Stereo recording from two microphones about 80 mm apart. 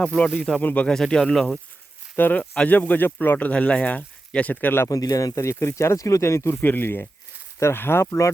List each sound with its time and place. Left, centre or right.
0.3 s speech: centre
0.6 s speech: left
0.9 s speech: centre
2.1 s speech: left
4.9 s speech: left